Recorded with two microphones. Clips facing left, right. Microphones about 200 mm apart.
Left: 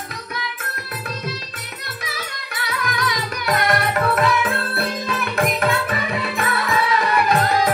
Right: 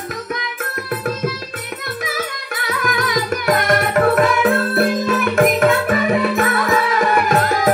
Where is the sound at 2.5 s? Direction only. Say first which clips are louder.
Right 4 dB; 50° right (ahead or behind).